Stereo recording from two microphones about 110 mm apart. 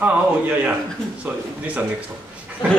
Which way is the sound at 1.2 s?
15° right (ahead or behind).